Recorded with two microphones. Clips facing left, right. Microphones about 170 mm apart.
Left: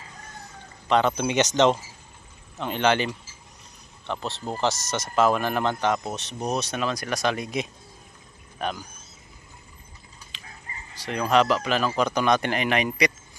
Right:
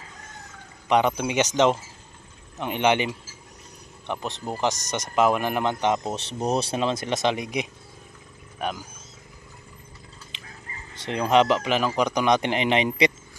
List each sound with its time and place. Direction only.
0.8 s speech: 15° right (ahead or behind)
4.1 s speech: 15° right (ahead or behind)
10.3 s chicken: 20° right (ahead or behind)
11.0 s speech: 20° right (ahead or behind)